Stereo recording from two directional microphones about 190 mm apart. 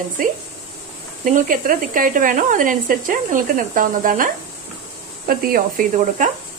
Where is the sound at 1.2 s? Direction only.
45° right (ahead or behind).